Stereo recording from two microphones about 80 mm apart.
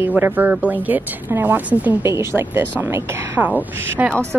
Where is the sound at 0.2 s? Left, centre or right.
Right.